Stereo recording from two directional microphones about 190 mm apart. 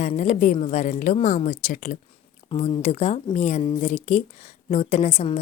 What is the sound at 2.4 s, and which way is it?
Speech, 30° left (ahead or behind).